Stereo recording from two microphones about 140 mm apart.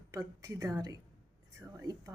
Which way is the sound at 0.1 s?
25° right (ahead or behind).